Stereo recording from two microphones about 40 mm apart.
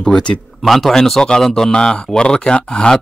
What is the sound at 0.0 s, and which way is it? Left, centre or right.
Speech, centre.